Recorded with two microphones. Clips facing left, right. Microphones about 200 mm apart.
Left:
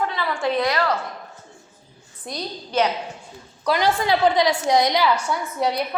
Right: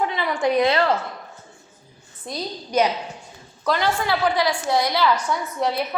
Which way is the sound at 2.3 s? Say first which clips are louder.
Right 2 dB; 10° right (ahead or behind).